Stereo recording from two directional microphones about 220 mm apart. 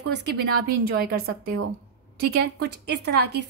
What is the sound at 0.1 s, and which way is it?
A woman's voice, 50° right (ahead or behind).